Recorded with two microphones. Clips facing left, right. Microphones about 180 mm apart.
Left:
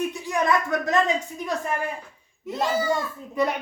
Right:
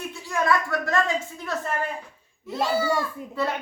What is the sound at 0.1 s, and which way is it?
A child's voice, 20° left (ahead or behind).